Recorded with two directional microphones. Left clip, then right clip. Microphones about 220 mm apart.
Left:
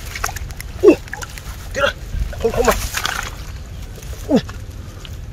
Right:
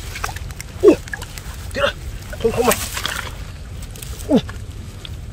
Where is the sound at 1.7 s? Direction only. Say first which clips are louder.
Left 1 dB; 10° left (ahead or behind).